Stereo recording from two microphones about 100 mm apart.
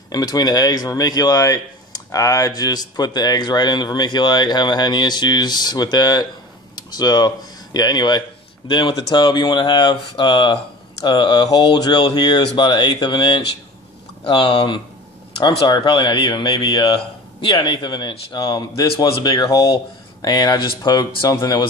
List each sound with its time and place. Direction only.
0.1 s speech: 40° left (ahead or behind)
8.6 s speech: 55° left (ahead or behind)